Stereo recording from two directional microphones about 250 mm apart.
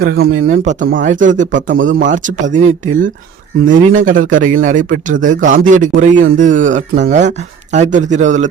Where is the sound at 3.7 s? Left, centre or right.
Right.